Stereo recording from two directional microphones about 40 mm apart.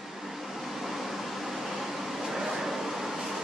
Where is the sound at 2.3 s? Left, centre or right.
Centre.